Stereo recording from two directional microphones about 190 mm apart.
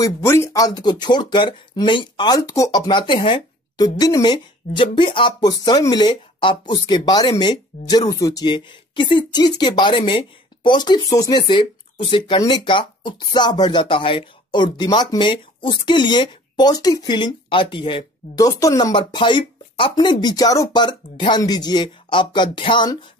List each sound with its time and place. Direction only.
0.0 s speech: 15° left (ahead or behind)